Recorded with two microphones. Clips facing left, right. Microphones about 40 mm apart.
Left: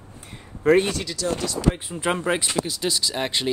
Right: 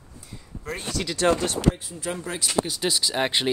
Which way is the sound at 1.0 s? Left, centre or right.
Right.